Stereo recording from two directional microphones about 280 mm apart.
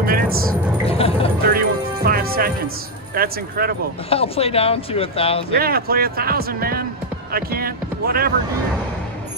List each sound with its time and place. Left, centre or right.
0.0 s speech: right
0.8 s speech: centre
1.4 s music: right
3.2 s speech: right
4.1 s speech: left
5.6 s speech: right